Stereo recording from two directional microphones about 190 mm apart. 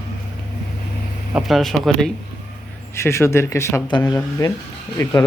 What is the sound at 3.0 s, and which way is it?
Speech, 15° left (ahead or behind).